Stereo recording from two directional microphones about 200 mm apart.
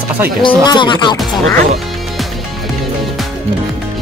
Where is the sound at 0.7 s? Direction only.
25° left (ahead or behind).